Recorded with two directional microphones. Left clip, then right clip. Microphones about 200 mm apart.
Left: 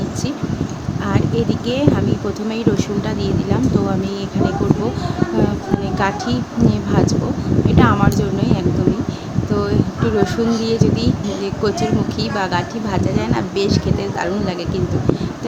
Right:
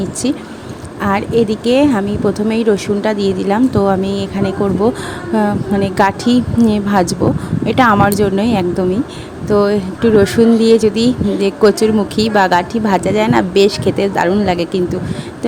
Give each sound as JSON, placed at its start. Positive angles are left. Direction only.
{"t": 1.0, "sound": "speech", "side_deg": -35}
{"t": 5.8, "sound": "speech", "side_deg": -40}